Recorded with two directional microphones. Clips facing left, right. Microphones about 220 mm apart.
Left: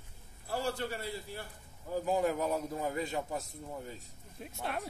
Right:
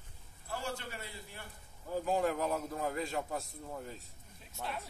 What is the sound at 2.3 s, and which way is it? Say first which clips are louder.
Speech: left 2 dB; centre (ahead or behind).